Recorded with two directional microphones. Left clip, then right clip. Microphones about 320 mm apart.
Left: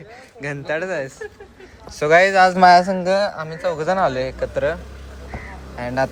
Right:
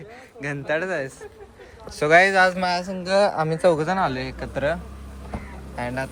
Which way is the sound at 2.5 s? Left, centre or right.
Left.